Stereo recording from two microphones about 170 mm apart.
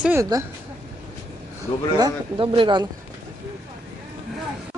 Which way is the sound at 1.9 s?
25° right (ahead or behind).